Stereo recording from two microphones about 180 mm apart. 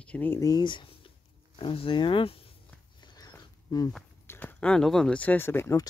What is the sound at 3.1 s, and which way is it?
Dog, 20° left (ahead or behind).